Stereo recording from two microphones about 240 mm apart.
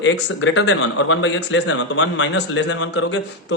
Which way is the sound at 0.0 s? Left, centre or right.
Left.